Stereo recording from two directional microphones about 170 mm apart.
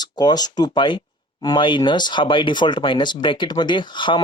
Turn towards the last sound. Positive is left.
turn(degrees=30)  # may be behind; listen again after turning